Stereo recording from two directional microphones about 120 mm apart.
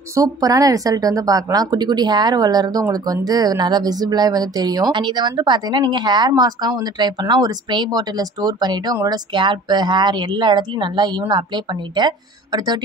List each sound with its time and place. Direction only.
0.1 s speech: 30° right (ahead or behind)